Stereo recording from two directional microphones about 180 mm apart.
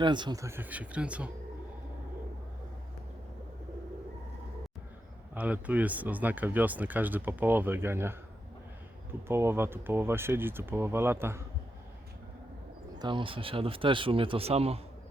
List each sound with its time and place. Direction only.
0.0 s speech: 25° right (ahead or behind); by 1.3 s 5° right (ahead or behind)
5.3 s speech: 10° right (ahead or behind)
9.2 s speech: 15° right (ahead or behind)
13.0 s speech: 25° right (ahead or behind)